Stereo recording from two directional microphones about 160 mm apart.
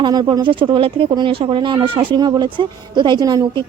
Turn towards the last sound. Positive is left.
turn(degrees=-25)  # may be behind; listen again after turning